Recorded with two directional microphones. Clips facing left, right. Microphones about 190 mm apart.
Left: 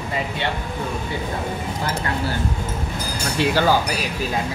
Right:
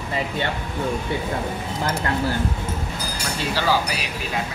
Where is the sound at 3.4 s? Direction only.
50° left (ahead or behind).